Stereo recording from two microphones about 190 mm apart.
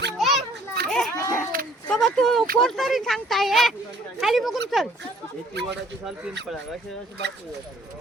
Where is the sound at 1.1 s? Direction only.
15° left (ahead or behind).